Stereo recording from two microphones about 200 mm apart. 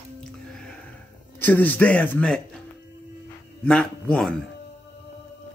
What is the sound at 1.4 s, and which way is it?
Speech, 10° left (ahead or behind).